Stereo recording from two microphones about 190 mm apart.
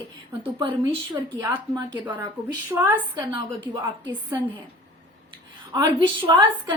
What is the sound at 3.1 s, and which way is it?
Speech, 25° right (ahead or behind).